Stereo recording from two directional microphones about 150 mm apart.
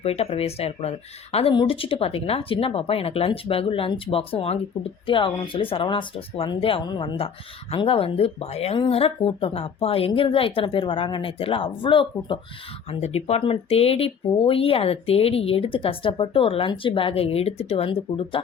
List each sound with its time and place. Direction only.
0.0 s speech: 40° left (ahead or behind)
12.9 s speech: 45° left (ahead or behind)